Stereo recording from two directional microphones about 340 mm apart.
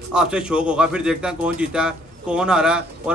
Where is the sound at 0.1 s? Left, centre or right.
Centre.